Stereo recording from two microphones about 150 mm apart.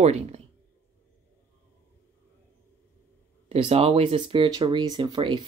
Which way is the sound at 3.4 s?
40° right (ahead or behind).